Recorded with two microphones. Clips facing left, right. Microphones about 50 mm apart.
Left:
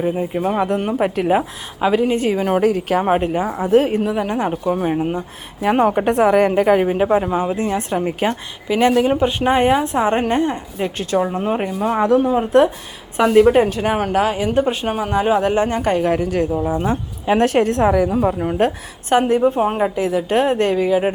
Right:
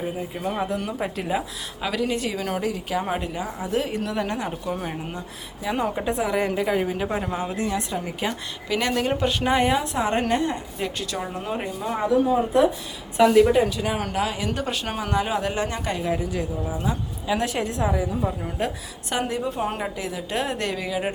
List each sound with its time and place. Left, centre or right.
0.2 s a woman's voice: left
0.5 s a woman's voice: left
1.8 s a woman's voice: left
2.6 s a woman's voice: left
4.0 s a woman's voice: centre
4.4 s a woman's voice: left
5.6 s a woman's voice: left
8.6 s a woman's voice: left
9.3 s a woman's voice: left
11.8 s speech: left
13.1 s a woman's voice: left
13.5 s a woman's voice: left
16.5 s speech: left
16.7 s a woman's voice: left